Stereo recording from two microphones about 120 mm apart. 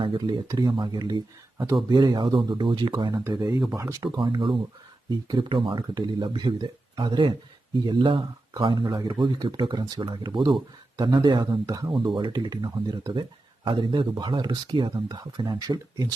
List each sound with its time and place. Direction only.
0.4 s speech: 30° right (ahead or behind)
4.0 s speech: 45° right (ahead or behind)